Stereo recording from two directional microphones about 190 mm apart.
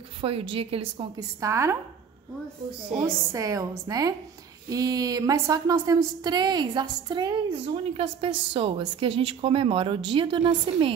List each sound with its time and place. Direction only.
0.2 s a woman's voice: 30° right (ahead or behind)
1.4 s a woman's voice: 15° right (ahead or behind)
3.3 s a woman's voice: 15° right (ahead or behind)